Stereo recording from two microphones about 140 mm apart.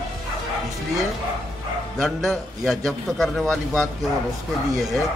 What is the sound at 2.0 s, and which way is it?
A man's voice, centre (ahead or behind).